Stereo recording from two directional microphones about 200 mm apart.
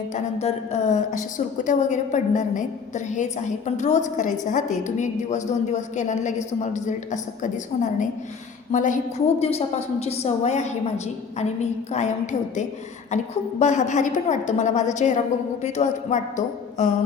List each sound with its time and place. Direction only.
0.1 s a woman's voice: 30° left (ahead or behind)